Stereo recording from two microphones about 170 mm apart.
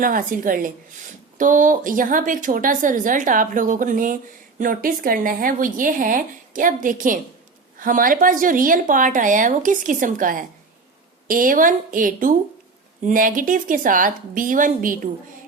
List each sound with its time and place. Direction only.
0.0 s speech: 55° right (ahead or behind)